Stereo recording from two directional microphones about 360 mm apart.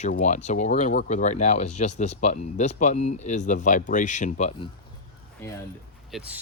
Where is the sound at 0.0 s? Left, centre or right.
Centre.